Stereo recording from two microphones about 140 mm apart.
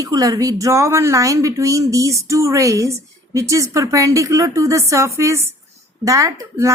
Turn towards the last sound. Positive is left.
turn(degrees=-20)  # may be behind; listen again after turning